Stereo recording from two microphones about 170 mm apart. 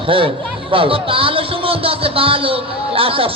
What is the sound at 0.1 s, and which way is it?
Speech, 30° right (ahead or behind).